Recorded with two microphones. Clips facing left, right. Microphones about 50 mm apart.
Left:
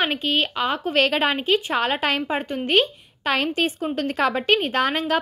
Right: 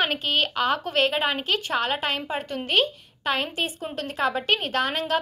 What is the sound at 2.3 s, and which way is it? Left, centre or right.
A woman's voice, left.